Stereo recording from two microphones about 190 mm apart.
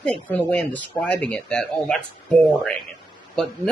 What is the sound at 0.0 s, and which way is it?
Speech, 5° left (ahead or behind).